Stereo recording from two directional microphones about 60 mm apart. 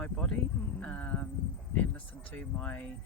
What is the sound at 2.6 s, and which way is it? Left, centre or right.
Speech, centre.